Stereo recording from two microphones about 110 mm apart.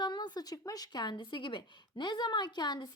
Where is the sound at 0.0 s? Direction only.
40° left (ahead or behind).